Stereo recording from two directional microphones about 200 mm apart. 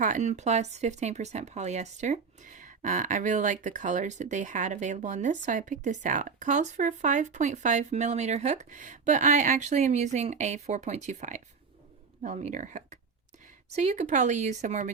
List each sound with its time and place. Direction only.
0.0 s speech: 35° right (ahead or behind)